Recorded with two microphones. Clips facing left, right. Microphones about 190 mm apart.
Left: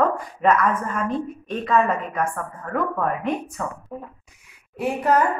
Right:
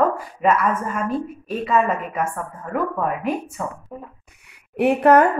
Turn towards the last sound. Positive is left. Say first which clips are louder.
# right 6 dB
turn(degrees=-65)  # may be behind; listen again after turning